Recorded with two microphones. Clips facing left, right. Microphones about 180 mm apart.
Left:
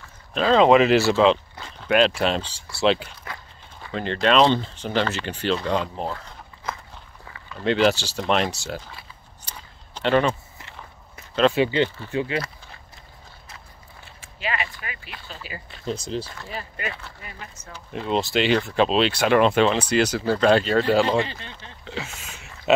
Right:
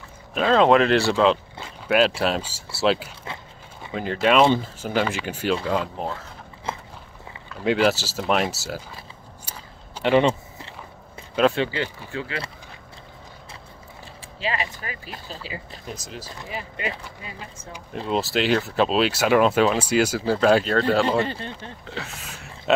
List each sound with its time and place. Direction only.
0.3 s speech: 5° right (ahead or behind)
7.5 s speech: 5° right (ahead or behind)
9.5 s a sound: 10° right (ahead or behind)
11.4 s speech: 10° right (ahead or behind)
12.1 s speech: 20° left (ahead or behind)
14.4 s speech: 30° right (ahead or behind)
15.9 s speech: 30° left (ahead or behind)
16.3 s speech: 15° right (ahead or behind)
17.9 s speech: centre (ahead or behind)
20.7 s speech: 5° left (ahead or behind)